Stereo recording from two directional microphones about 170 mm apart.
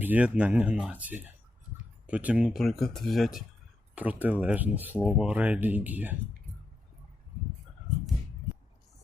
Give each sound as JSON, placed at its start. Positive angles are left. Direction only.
{"t": 0.0, "sound": "speech", "side_deg": -10}